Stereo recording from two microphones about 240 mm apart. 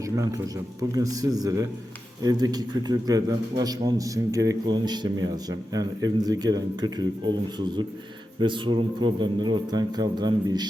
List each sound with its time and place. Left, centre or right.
0.0 s a man's voice: centre
8.4 s speech: centre